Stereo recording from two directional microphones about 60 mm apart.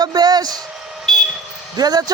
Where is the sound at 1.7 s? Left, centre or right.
Right.